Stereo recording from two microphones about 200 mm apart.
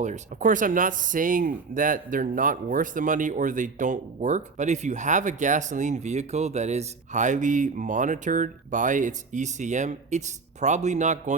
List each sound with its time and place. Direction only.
0.0 s speech: 40° right (ahead or behind)